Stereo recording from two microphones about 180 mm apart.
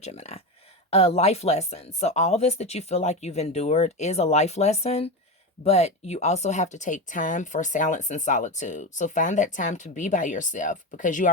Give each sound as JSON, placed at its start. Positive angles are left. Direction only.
{"t": 0.0, "sound": "speech", "side_deg": 35}